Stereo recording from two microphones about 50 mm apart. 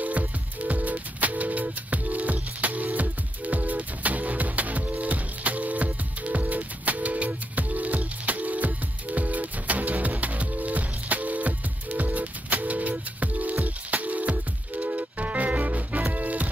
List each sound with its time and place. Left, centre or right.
0.0 s music: right